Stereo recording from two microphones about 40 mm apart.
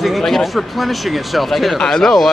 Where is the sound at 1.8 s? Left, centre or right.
Centre.